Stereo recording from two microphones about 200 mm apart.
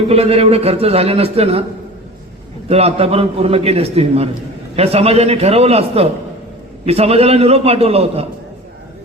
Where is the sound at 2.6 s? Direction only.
30° right (ahead or behind).